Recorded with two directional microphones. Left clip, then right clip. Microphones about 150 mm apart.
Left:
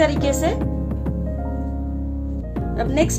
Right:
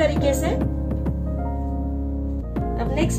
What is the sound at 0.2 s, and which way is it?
Speech, 35° left (ahead or behind).